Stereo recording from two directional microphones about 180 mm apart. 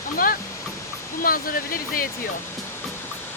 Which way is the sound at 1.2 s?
50° left (ahead or behind).